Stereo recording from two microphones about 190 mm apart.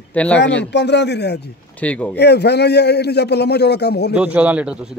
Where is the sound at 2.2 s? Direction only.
60° left (ahead or behind).